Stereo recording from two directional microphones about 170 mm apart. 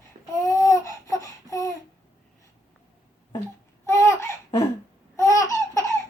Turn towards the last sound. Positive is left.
turn(degrees=20)  # may be behind; listen again after turning